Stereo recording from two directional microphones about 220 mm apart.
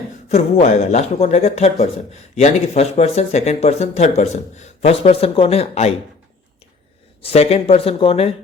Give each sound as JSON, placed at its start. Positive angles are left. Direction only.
{"t": 0.3, "sound": "speech", "side_deg": 30}
{"t": 7.2, "sound": "speech", "side_deg": 25}